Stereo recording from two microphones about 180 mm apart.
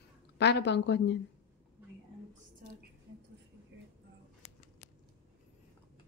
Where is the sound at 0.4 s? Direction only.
70° left (ahead or behind).